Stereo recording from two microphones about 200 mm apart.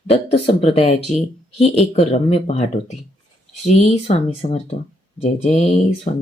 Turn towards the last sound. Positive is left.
turn(degrees=35)  # may be behind; listen again after turning